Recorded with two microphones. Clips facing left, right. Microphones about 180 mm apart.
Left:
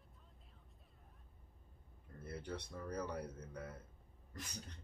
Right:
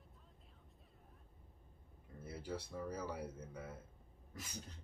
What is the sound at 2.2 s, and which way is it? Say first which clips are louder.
Speech: right 1 dB; 5° right (ahead or behind).